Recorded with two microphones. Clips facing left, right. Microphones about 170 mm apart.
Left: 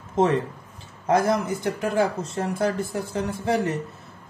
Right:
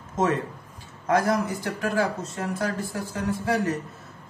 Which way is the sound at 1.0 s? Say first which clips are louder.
Left 2 dB; 25° left (ahead or behind).